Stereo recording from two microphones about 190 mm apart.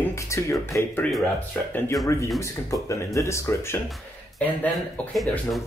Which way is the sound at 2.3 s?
15° left (ahead or behind).